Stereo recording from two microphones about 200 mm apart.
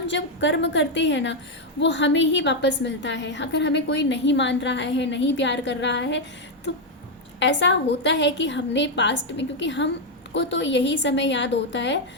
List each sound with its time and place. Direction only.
0.1 s a woman's voice: 65° left (ahead or behind)
7.3 s a woman's voice: 65° left (ahead or behind)